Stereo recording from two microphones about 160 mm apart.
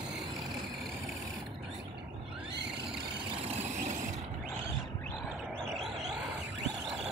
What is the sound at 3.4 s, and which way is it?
Vehicle, 40° right (ahead or behind).